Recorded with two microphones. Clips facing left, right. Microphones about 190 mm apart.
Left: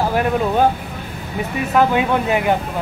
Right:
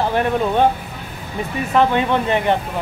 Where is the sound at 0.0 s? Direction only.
5° left (ahead or behind).